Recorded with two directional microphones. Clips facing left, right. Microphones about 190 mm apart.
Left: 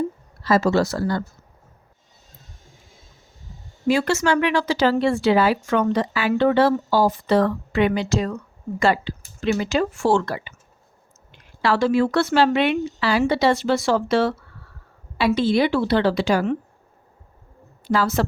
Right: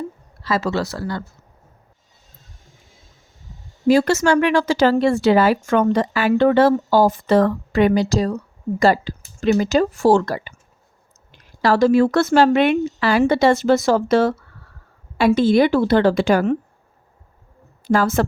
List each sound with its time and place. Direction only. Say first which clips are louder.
0.4 s speech: left 3 dB; 45° left (ahead or behind)
3.8 s a woman's voice: right 4 dB; 40° right (ahead or behind)
15.4 s a woman's voice: right 4 dB; 50° right (ahead or behind)
17.8 s a woman's voice: right 3 dB; 50° right (ahead or behind)